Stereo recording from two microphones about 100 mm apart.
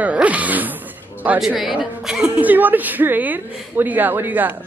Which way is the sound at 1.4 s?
5° right (ahead or behind).